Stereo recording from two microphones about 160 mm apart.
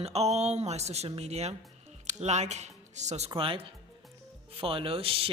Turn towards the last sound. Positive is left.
turn(degrees=-35)  # may be behind; listen again after turning